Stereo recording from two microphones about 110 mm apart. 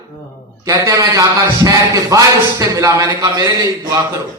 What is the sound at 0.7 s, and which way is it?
A man's voice, 30° right (ahead or behind).